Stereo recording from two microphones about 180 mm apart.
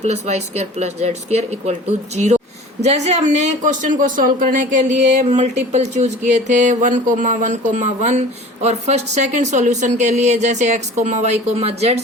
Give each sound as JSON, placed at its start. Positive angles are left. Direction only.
{"t": 0.0, "sound": "speech", "side_deg": -40}